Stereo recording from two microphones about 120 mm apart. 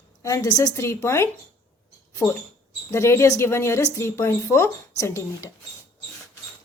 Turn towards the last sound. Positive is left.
turn(degrees=25)  # may be behind; listen again after turning